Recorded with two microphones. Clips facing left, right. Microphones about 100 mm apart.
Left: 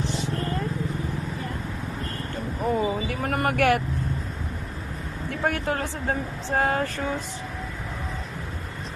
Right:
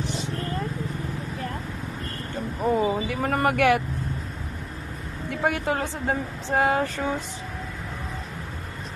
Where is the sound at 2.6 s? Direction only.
20° right (ahead or behind).